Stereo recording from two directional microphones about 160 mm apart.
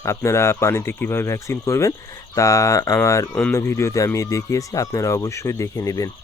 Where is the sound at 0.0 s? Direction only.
15° left (ahead or behind).